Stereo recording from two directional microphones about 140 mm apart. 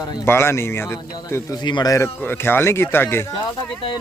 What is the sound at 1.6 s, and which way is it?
Speech, 30° left (ahead or behind).